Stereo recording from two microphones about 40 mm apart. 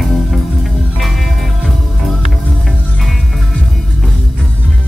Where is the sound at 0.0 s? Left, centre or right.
Centre.